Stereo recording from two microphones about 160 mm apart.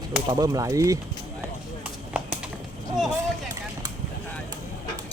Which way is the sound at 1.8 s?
5° right (ahead or behind).